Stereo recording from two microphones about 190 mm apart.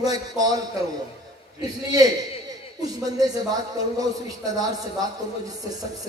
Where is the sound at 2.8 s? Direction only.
20° right (ahead or behind).